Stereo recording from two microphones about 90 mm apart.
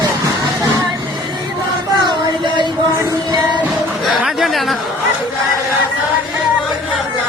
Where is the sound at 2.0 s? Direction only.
55° right (ahead or behind).